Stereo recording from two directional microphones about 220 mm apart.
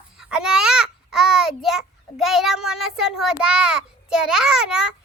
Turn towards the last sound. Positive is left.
turn(degrees=-5)  # may be behind; listen again after turning